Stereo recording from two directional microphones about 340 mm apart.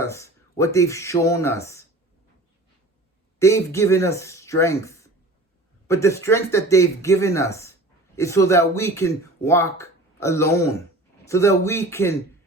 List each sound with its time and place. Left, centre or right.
0.0 s speech: centre
3.3 s speech: centre